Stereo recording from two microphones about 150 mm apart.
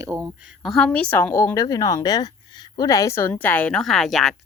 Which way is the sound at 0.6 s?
5° left (ahead or behind).